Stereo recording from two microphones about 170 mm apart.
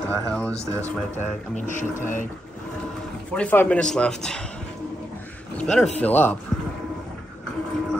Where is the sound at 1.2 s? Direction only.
45° left (ahead or behind).